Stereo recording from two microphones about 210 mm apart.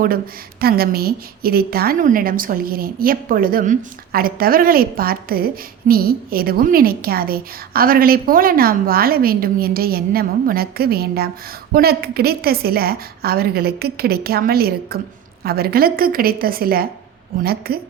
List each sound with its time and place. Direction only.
0.6 s a woman's voice: 45° right (ahead or behind)